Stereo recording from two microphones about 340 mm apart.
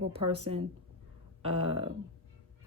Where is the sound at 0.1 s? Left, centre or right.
Centre.